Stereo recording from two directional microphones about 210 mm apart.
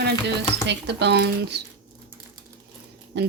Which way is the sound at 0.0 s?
55° right (ahead or behind).